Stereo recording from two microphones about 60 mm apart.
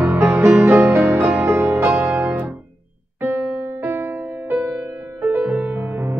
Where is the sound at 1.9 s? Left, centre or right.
Right.